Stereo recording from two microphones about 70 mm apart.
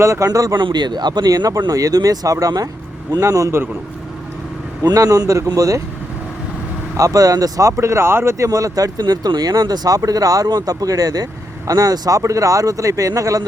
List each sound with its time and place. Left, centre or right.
0.0 s speech: right
0.3 s speech: right
0.5 s speech: right
4.8 s speech: right
6.9 s speech: right
7.7 s speech: right
8.4 s speech: right
10.1 s speech: right